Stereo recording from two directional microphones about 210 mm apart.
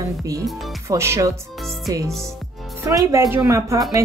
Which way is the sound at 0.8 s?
15° right (ahead or behind).